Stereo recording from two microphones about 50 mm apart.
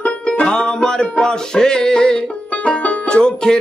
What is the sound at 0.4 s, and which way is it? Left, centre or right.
Music, centre.